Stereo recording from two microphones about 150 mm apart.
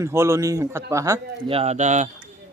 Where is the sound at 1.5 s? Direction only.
45° right (ahead or behind).